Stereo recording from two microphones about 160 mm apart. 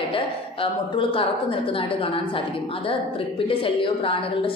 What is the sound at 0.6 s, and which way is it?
Speech, 35° left (ahead or behind).